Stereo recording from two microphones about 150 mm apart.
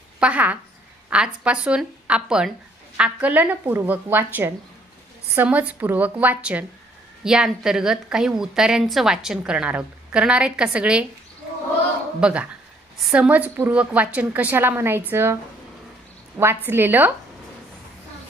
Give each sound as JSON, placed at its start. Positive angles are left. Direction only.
{"t": 0.2, "sound": "a woman's voice", "side_deg": -10}
{"t": 12.2, "sound": "a woman's voice", "side_deg": -10}
{"t": 16.6, "sound": "a woman's voice", "side_deg": -15}